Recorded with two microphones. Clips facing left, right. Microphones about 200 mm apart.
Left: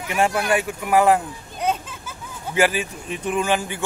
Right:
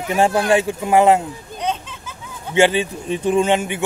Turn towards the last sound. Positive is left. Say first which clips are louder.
# right 5 dB
turn(degrees=-20)  # may be behind; listen again after turning